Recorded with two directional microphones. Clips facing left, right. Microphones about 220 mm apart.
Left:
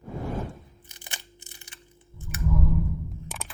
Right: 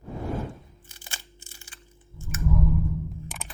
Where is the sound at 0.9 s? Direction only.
20° left (ahead or behind).